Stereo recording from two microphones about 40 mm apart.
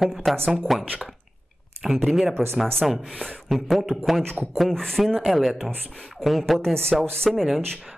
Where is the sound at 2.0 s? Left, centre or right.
Centre.